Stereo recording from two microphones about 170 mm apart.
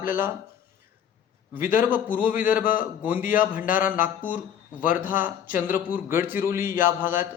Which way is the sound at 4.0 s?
50° left (ahead or behind).